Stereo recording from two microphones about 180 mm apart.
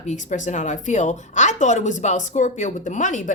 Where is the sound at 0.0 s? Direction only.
40° left (ahead or behind).